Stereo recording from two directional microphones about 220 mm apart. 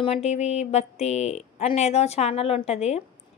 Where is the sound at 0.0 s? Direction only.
30° left (ahead or behind).